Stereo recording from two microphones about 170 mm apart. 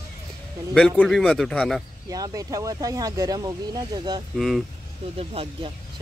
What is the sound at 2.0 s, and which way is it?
Speech, 20° right (ahead or behind).